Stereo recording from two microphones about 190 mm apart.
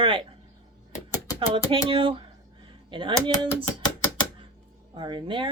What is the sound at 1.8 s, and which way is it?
Speech, 30° right (ahead or behind).